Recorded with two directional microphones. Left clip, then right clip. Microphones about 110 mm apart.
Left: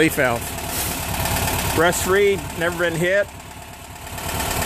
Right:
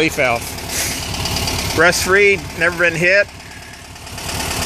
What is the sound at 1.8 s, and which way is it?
Speech, 5° left (ahead or behind).